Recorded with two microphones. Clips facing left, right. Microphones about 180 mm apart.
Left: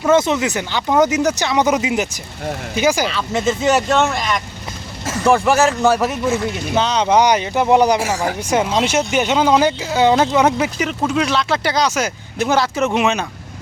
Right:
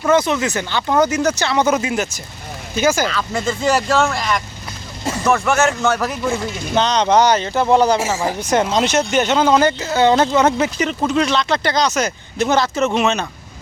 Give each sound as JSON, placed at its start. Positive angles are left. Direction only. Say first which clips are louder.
{"t": 0.0, "sound": "speech", "louder": "left 1 dB", "side_deg": 20}
{"t": 3.1, "sound": "speech", "louder": "left 2 dB", "side_deg": 25}
{"t": 4.0, "sound": "speech", "louder": "even", "side_deg": 0}
{"t": 5.2, "sound": "speech", "louder": "left 3 dB", "side_deg": 30}
{"t": 6.7, "sound": "speech", "louder": "right 1 dB", "side_deg": 5}